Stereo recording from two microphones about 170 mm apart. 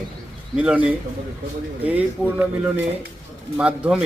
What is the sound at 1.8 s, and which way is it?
A man's voice, 10° right (ahead or behind).